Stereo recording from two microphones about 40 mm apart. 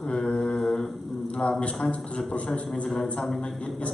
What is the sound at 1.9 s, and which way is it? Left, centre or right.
Speech, left.